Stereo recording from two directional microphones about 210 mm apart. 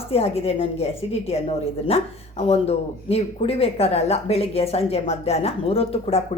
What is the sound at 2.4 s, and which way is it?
Speech, 30° left (ahead or behind).